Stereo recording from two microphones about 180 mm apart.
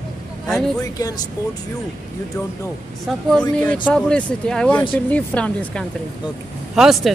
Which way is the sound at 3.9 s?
5° left (ahead or behind).